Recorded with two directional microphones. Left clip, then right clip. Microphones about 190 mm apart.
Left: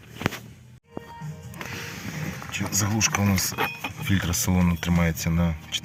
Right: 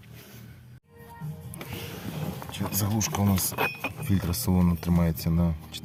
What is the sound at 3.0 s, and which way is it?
Speech, 5° right (ahead or behind).